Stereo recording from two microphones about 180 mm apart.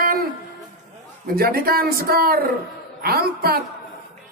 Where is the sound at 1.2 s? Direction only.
55° right (ahead or behind).